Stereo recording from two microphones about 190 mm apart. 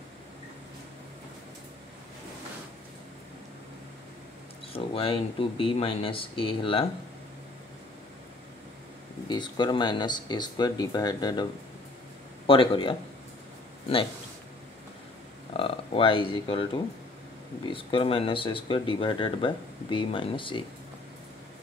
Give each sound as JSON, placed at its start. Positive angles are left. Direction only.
{"t": 4.7, "sound": "speech", "side_deg": 30}
{"t": 9.3, "sound": "speech", "side_deg": 25}
{"t": 12.4, "sound": "speech", "side_deg": 25}
{"t": 15.5, "sound": "speech", "side_deg": 30}